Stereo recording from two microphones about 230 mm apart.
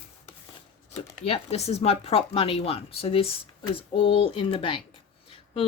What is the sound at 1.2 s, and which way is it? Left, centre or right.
Speech, left.